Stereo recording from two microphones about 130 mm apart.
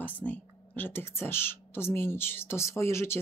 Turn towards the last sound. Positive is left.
turn(degrees=20)  # may be behind; listen again after turning